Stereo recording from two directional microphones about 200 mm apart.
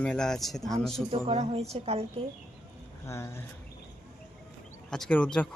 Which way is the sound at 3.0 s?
15° left (ahead or behind).